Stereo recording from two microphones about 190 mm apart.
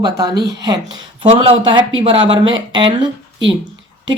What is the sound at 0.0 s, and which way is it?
Speech, 20° right (ahead or behind).